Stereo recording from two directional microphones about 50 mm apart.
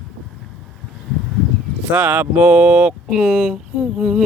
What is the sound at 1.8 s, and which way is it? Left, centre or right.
Speech, right.